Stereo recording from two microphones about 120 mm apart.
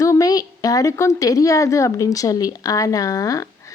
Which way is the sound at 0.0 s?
30° left (ahead or behind).